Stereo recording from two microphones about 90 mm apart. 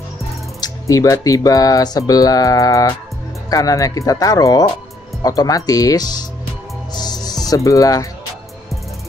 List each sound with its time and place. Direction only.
0.6 s speech: 45° left (ahead or behind)
6.9 s music: 50° left (ahead or behind)